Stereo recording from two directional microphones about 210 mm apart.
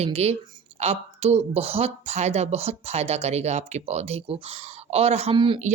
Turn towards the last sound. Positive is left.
turn(degrees=-25)  # may be behind; listen again after turning